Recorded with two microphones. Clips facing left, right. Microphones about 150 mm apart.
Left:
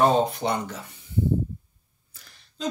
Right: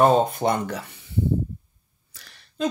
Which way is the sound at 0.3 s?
50° right (ahead or behind).